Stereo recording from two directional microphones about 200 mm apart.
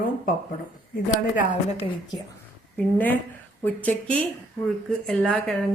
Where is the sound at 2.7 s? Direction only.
10° left (ahead or behind).